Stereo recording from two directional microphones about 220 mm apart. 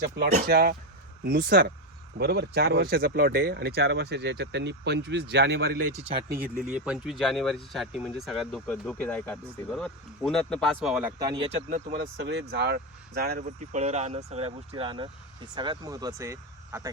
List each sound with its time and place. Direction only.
0.3 s speech: 40° right (ahead or behind)
5.9 s speech: 25° right (ahead or behind)
6.4 s speech: 5° right (ahead or behind)
11.2 s speech: 20° right (ahead or behind)
11.7 s speech: 35° right (ahead or behind)
12.2 s speech: 50° right (ahead or behind)
13.7 s speech: 30° right (ahead or behind); by 16.9 s 10° right (ahead or behind)